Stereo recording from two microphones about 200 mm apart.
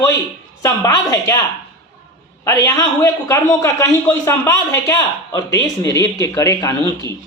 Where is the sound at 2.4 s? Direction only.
15° left (ahead or behind).